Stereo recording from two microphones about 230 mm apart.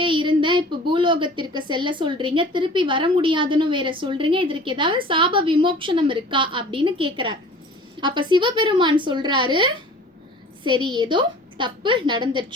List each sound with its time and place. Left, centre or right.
0.0 s speech: right